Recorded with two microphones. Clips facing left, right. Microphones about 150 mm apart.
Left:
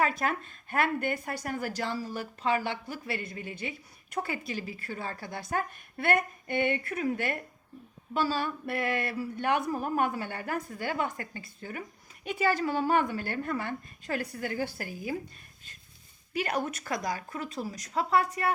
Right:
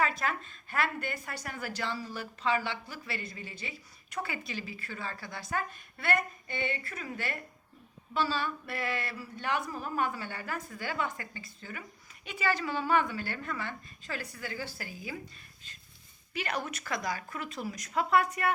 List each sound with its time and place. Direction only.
0.0 s a woman's voice: 50° left (ahead or behind)
16.3 s a woman's voice: 45° left (ahead or behind)